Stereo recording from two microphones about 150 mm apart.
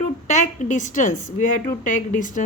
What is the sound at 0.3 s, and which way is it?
A woman's voice, 60° left (ahead or behind).